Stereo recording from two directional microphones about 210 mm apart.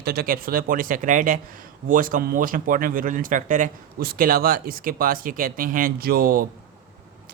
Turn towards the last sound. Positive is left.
turn(degrees=-45)  # may be behind; listen again after turning